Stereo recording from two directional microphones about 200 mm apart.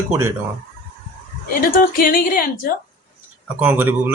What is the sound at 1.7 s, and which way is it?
A woman's voice, 45° left (ahead or behind).